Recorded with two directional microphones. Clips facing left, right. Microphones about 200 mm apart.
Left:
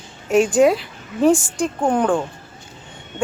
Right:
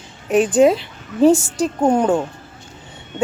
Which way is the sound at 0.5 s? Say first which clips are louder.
Right 2 dB; 20° right (ahead or behind).